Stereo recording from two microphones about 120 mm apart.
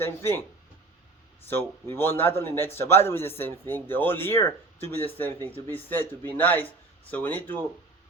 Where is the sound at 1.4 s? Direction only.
20° left (ahead or behind).